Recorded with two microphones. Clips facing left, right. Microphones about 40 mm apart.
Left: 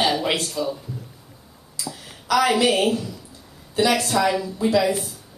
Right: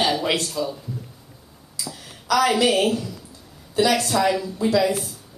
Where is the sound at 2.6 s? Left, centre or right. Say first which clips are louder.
Even; centre.